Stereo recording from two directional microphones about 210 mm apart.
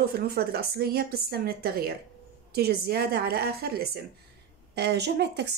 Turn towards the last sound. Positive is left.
turn(degrees=-55)  # may be behind; listen again after turning